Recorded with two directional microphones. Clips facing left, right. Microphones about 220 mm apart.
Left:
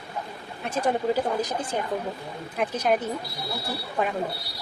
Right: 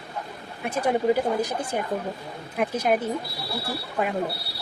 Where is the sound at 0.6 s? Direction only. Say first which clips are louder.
Right 2 dB; 10° right (ahead or behind).